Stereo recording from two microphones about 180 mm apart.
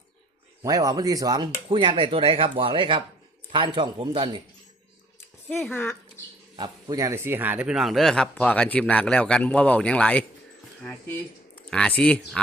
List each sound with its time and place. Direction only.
0.6 s speech: 20° right (ahead or behind)
5.5 s speech: 10° left (ahead or behind)
6.6 s speech: 20° right (ahead or behind); by 10.2 s 5° left (ahead or behind)
11.5 s speech: 5° left (ahead or behind)